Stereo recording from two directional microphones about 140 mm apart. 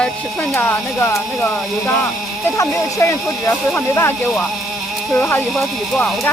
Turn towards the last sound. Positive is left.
turn(degrees=5)  # may be behind; listen again after turning